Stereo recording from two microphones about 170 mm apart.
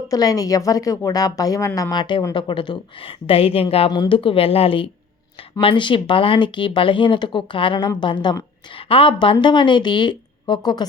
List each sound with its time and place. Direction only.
0.1 s a woman's voice: 20° left (ahead or behind)